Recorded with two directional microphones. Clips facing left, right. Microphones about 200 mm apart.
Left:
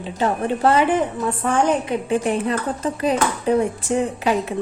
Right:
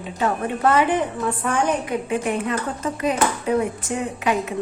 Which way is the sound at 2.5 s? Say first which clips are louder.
Left 2 dB; 30° left (ahead or behind).